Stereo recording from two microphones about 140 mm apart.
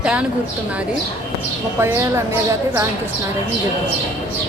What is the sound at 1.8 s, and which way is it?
Speech, 15° right (ahead or behind).